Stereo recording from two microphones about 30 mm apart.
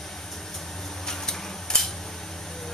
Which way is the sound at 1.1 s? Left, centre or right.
Centre.